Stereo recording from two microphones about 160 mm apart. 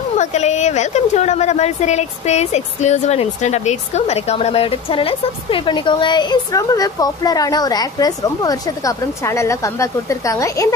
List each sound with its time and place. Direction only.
0.2 s a woman's voice: 45° left (ahead or behind); by 10.7 s 20° left (ahead or behind)